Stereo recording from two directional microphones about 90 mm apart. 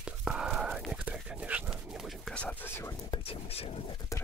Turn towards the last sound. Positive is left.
turn(degrees=90)